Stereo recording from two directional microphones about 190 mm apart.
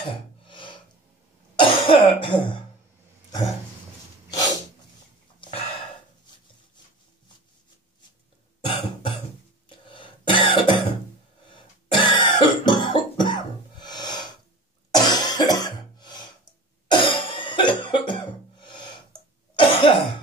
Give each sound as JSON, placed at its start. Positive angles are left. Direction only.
{"t": 1.6, "sound": "cough", "side_deg": 30}
{"t": 8.5, "sound": "cough", "side_deg": 25}